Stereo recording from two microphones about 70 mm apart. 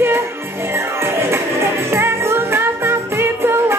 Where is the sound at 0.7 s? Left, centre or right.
Right.